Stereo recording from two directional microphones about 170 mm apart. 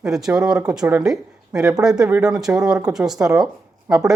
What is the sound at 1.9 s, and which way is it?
Speech, 15° right (ahead or behind).